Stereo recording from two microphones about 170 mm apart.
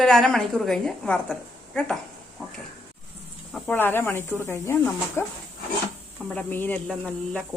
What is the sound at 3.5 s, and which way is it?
Speech, 10° left (ahead or behind).